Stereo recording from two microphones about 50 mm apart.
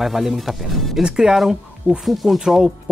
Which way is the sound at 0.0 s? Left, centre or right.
Centre.